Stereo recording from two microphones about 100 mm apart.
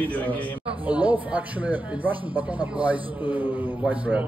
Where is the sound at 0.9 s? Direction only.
15° right (ahead or behind).